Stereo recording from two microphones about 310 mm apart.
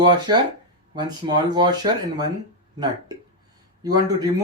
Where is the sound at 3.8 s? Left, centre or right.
Centre.